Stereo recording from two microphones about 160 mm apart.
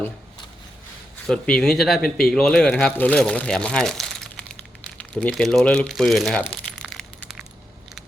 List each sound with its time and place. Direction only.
1.3 s speech: 5° left (ahead or behind)